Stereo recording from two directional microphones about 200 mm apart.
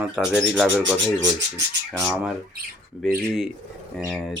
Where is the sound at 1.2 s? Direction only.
60° right (ahead or behind).